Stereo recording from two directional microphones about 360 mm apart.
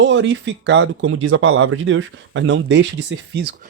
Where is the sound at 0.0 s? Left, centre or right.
Right.